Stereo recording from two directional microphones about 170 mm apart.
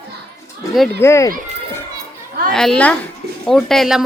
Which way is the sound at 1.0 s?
15° left (ahead or behind).